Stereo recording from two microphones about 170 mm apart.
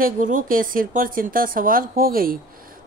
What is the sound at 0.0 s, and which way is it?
Speech, 55° right (ahead or behind).